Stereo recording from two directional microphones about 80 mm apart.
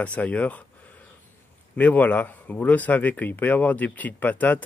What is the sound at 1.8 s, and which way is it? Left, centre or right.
Speech, centre.